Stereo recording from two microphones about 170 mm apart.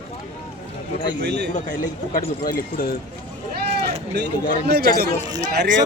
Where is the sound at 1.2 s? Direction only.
75° right (ahead or behind).